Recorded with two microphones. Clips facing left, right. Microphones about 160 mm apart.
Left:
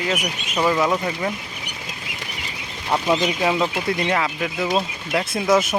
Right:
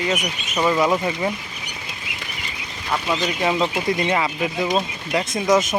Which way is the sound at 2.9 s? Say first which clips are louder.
Left 3 dB; 20° left (ahead or behind).